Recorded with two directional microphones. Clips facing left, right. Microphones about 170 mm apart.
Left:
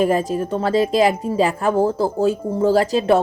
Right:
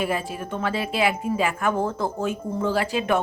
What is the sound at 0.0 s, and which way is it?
Speech, 40° left (ahead or behind).